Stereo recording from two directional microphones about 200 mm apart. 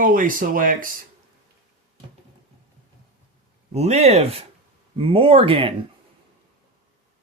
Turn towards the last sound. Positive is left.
turn(degrees=-25)  # may be behind; listen again after turning